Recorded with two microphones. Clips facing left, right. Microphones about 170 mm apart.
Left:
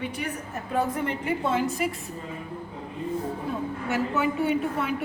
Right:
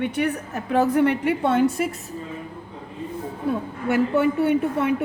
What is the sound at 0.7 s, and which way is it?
Speech, 80° right.